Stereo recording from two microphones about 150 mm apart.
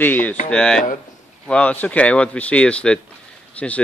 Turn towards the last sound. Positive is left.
turn(degrees=10)  # may be behind; listen again after turning